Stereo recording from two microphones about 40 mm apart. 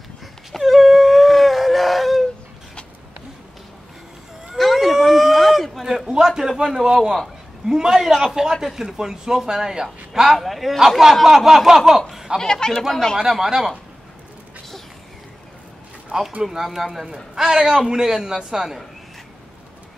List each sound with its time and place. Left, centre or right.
0.5 s a sound: centre
4.6 s vehicle: centre
4.9 s a sound: centre
6.6 s a man's voice: centre
10.3 s a man's voice: centre
11.2 s a man's voice: centre
12.4 s speech: centre
13.3 s a man's voice: centre
16.1 s speech: centre
16.5 s a man's voice: centre